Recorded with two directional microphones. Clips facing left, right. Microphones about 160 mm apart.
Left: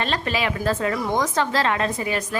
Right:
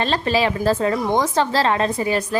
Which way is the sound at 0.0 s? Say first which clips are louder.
Right 5 dB; 30° right (ahead or behind).